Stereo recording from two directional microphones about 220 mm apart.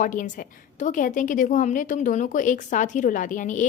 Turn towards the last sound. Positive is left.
turn(degrees=35)  # may be behind; listen again after turning